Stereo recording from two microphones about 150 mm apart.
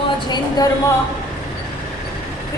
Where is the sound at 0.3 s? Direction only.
30° left (ahead or behind).